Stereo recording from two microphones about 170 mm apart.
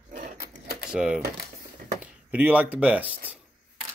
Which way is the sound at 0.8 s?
5° right (ahead or behind).